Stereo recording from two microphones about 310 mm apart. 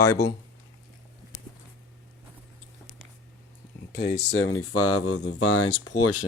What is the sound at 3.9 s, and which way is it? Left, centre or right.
Speech, left.